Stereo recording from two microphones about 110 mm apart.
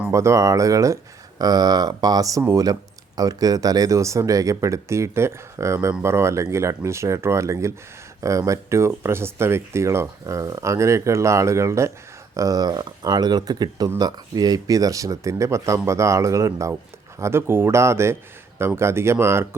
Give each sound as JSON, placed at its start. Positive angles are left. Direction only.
{"t": 0.1, "sound": "speech", "side_deg": -25}